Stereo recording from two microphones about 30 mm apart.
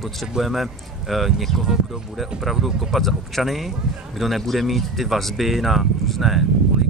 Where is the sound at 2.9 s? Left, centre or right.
Centre.